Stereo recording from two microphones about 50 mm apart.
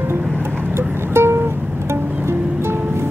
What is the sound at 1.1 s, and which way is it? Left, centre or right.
Music, right.